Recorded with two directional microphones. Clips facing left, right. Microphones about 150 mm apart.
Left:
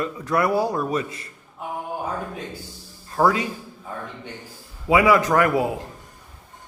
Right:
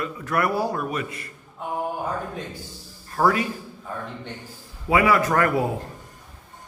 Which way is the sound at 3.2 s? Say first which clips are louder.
Left 1 dB; 20° left (ahead or behind).